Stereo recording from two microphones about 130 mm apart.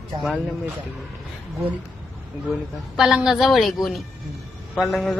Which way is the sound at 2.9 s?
5° right (ahead or behind).